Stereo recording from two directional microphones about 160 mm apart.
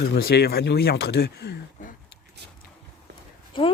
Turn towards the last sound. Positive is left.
turn(degrees=30)  # may be behind; listen again after turning